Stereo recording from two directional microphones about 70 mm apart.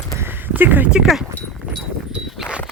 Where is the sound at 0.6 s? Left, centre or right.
Right.